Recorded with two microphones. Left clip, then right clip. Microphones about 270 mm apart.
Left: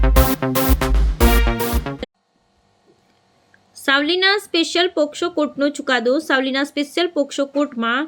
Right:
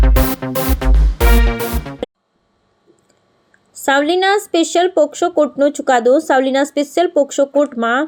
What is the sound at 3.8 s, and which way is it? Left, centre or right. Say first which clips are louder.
Speech: right 3 dB; centre.